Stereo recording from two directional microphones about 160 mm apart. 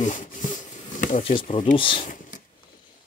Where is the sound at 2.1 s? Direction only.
55° left (ahead or behind).